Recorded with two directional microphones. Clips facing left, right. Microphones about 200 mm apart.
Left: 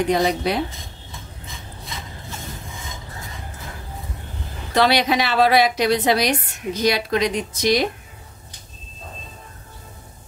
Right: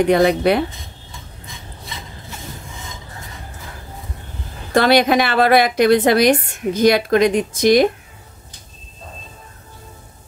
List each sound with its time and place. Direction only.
0.1 s a woman's voice: 60° right (ahead or behind)
4.7 s a woman's voice: 50° right (ahead or behind)